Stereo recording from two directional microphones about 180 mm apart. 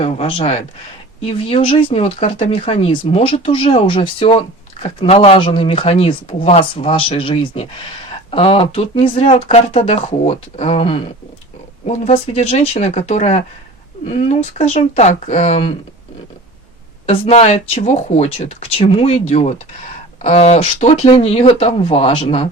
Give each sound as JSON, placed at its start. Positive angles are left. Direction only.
{"t": 0.0, "sound": "speech", "side_deg": 30}
{"t": 17.1, "sound": "speech", "side_deg": 35}